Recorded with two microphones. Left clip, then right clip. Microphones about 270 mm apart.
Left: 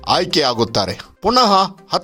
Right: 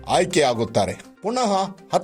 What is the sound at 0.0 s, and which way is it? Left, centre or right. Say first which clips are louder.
Speech: left 3 dB; centre.